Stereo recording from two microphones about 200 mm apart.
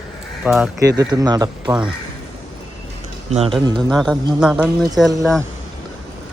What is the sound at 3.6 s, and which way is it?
Speech, 20° right (ahead or behind).